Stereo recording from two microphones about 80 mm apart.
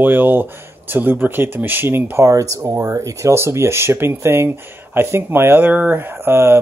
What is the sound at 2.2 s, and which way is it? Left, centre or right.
Speech, right.